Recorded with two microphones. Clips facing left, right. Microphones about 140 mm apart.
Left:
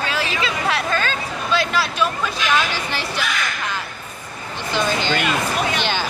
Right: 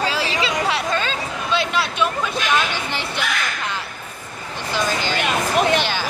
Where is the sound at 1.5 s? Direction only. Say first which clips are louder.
Left 1 dB; 25° right (ahead or behind).